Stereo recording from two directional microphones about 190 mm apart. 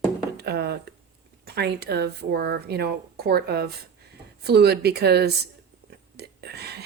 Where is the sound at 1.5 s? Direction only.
60° right (ahead or behind).